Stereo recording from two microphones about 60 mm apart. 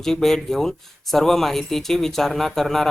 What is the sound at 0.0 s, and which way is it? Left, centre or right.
Speech, centre.